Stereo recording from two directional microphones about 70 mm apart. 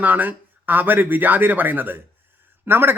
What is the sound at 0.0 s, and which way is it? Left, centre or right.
Speech, right.